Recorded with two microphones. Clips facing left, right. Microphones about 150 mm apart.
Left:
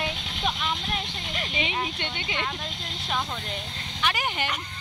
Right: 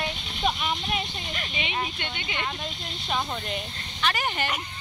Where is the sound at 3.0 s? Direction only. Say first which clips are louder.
Right 2 dB; 5° right (ahead or behind).